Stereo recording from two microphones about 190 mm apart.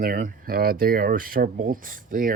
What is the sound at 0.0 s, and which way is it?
Speech, 50° right (ahead or behind).